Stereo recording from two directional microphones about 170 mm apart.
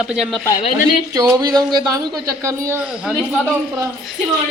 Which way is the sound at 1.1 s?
20° right (ahead or behind).